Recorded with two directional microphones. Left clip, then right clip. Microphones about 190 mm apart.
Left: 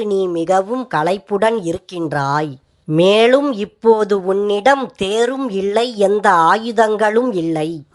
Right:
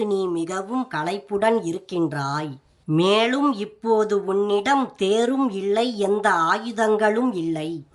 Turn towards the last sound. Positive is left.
turn(degrees=15)  # may be behind; listen again after turning